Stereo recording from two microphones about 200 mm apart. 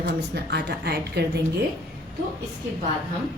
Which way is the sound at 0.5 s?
55° right (ahead or behind).